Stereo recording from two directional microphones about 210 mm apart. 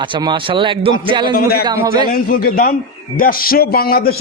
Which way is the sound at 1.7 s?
15° right (ahead or behind).